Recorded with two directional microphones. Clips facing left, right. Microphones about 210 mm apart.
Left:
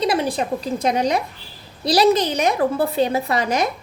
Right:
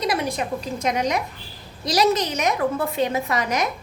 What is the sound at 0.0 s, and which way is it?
A woman's voice, 30° left (ahead or behind).